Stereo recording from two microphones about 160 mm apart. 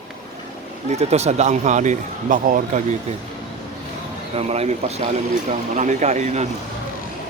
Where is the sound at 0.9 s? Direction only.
45° right (ahead or behind).